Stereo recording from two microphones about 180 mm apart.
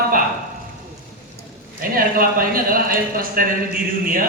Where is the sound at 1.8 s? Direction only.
55° right (ahead or behind).